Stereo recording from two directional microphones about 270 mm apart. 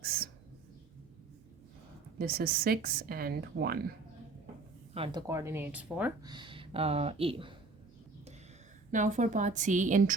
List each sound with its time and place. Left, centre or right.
0.0 s a sound: right
2.1 s speech: right
4.9 s speech: centre
8.9 s a woman's voice: right